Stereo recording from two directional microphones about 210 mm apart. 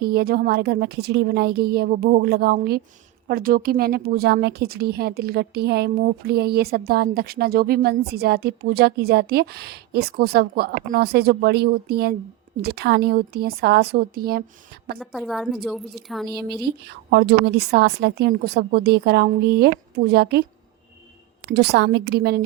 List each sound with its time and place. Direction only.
0.0 s a woman's voice: 50° right (ahead or behind)
14.9 s a woman's voice: centre (ahead or behind)
16.2 s a woman's voice: 50° right (ahead or behind)
21.5 s a woman's voice: 50° right (ahead or behind)